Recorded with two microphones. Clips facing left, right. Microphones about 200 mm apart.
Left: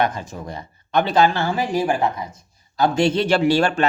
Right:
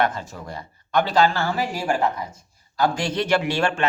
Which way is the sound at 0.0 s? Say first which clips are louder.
Left 1 dB; 15° left (ahead or behind).